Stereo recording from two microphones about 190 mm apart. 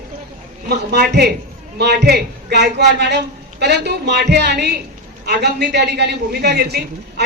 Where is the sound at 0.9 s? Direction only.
60° right (ahead or behind).